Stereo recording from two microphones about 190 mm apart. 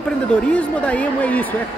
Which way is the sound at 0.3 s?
5° left (ahead or behind).